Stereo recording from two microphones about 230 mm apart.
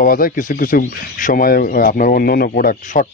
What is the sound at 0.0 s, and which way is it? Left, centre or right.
Speech, left.